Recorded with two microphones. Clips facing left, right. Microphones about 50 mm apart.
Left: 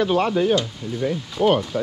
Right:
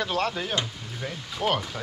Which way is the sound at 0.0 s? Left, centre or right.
Centre.